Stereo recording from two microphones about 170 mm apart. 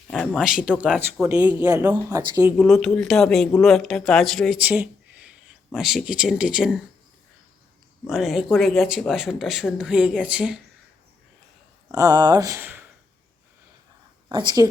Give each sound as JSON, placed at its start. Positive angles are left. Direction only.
{"t": 0.1, "sound": "speech", "side_deg": 5}
{"t": 0.9, "sound": "speech", "side_deg": -10}
{"t": 2.6, "sound": "speech", "side_deg": 0}
{"t": 8.0, "sound": "speech", "side_deg": 0}
{"t": 11.9, "sound": "speech", "side_deg": -20}
{"t": 14.3, "sound": "speech", "side_deg": -25}